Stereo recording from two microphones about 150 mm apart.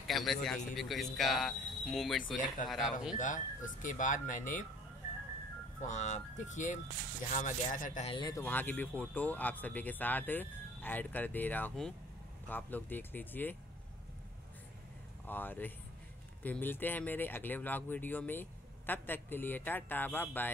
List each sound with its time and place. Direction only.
0.0 s speech: centre (ahead or behind)
3.2 s speech: 60° left (ahead or behind)
5.8 s speech: 50° left (ahead or behind)
8.1 s speech: 30° left (ahead or behind)
8.4 s speech: 10° left (ahead or behind)
15.2 s speech: 15° left (ahead or behind)